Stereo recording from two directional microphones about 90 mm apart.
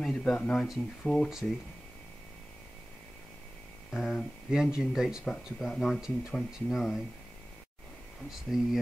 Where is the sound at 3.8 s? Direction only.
5° left (ahead or behind).